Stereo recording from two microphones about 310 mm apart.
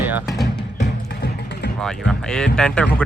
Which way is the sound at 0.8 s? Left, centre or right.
Left.